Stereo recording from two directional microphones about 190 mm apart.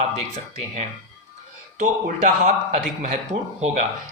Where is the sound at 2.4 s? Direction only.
35° right (ahead or behind).